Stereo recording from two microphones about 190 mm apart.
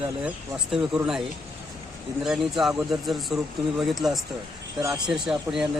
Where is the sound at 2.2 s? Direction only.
Centre (ahead or behind).